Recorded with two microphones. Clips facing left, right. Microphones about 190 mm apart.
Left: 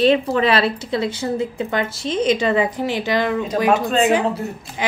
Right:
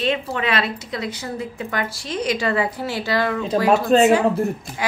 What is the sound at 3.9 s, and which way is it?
Speech, 40° right (ahead or behind).